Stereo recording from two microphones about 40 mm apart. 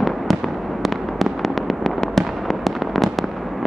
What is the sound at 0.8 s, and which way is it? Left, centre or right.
Fireworks, centre.